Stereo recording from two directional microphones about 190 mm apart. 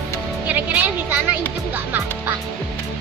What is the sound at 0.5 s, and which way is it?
Music, 10° right (ahead or behind).